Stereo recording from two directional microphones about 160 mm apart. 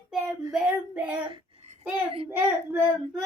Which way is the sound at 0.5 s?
5° right (ahead or behind).